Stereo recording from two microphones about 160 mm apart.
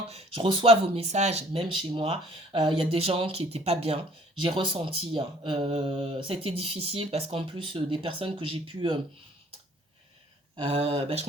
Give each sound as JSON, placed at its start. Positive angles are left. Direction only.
{"t": 0.1, "sound": "speech", "side_deg": -35}
{"t": 10.6, "sound": "speech", "side_deg": -40}